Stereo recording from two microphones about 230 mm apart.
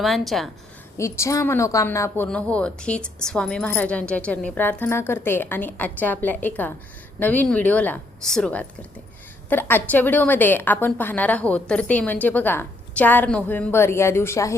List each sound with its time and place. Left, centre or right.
0.0 s a woman's voice: centre
0.9 s a woman's voice: centre